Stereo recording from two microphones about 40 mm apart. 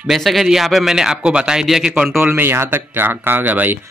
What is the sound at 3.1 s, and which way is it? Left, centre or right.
Speech, right.